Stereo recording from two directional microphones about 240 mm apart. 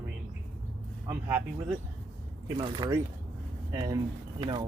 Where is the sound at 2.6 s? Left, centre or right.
Centre.